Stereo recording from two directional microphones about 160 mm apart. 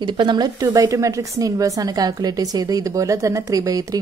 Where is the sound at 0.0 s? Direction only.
30° right (ahead or behind).